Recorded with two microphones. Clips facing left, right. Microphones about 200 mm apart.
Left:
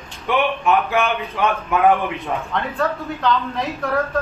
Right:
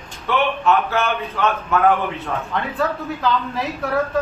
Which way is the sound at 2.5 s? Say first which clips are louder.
Right 1 dB; centre (ahead or behind).